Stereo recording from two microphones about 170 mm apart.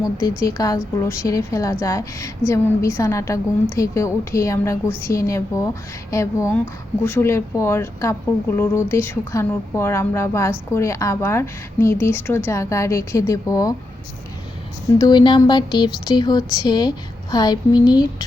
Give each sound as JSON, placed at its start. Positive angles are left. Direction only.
{"t": 0.0, "sound": "speech", "side_deg": 20}
{"t": 14.9, "sound": "speech", "side_deg": 25}